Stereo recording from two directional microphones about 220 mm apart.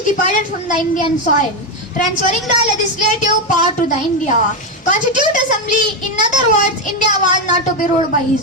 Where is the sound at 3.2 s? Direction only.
35° left (ahead or behind).